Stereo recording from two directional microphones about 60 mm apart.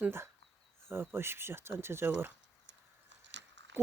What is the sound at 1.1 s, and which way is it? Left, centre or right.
Speech, right.